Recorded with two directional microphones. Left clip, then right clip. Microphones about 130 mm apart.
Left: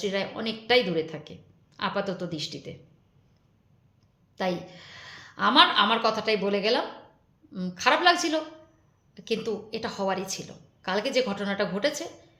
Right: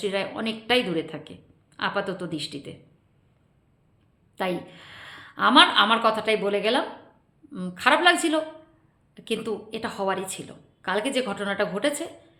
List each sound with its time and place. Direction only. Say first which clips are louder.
0.0 s a woman's voice: right 2 dB; 30° right (ahead or behind)
4.4 s a woman's voice: right 1 dB; 30° right (ahead or behind)